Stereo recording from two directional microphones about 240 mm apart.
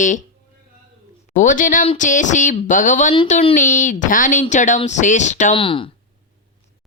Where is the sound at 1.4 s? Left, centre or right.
Left.